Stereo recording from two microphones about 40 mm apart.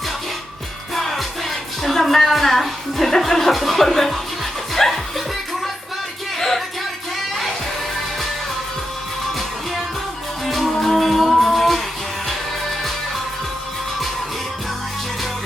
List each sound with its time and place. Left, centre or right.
0.9 s music: centre
10.4 s music: centre